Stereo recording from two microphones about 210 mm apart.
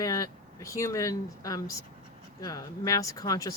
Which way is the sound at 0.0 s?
15° left (ahead or behind).